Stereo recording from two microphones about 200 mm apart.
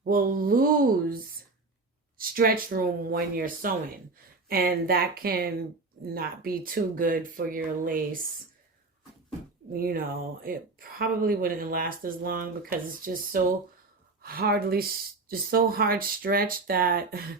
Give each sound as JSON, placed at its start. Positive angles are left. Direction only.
{"t": 0.0, "sound": "speech", "side_deg": -45}
{"t": 2.1, "sound": "speech", "side_deg": -45}
{"t": 9.7, "sound": "speech", "side_deg": -45}